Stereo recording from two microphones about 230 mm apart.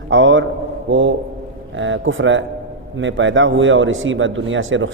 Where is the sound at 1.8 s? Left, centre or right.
Right.